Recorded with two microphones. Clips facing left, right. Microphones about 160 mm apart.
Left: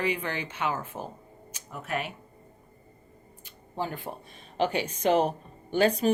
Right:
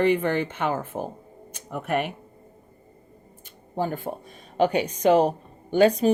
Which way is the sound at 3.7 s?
50° right (ahead or behind).